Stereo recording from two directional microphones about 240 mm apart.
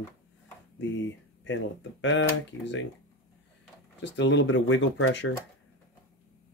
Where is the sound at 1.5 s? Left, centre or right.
Left.